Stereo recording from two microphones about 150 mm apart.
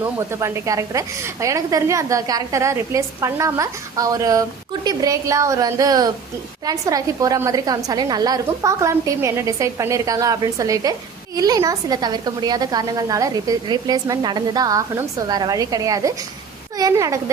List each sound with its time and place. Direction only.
0.0 s a woman's voice: 15° right (ahead or behind)